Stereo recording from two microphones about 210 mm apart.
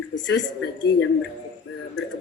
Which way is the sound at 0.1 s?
60° left (ahead or behind).